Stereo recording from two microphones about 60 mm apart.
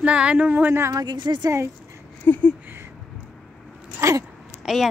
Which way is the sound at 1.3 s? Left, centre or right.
Right.